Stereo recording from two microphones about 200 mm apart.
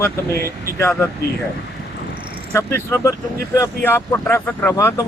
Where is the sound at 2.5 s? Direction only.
15° left (ahead or behind).